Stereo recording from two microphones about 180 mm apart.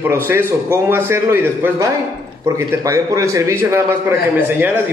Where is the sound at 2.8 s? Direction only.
15° right (ahead or behind).